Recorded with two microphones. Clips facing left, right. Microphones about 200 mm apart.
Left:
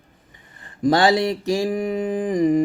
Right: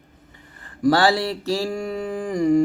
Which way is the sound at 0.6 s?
20° left (ahead or behind).